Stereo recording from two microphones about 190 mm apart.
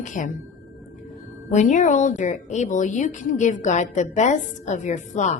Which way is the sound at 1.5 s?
40° left (ahead or behind).